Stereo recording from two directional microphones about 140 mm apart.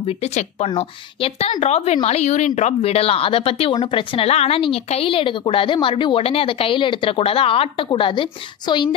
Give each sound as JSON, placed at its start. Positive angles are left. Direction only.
{"t": 0.0, "sound": "a woman's voice", "side_deg": 55}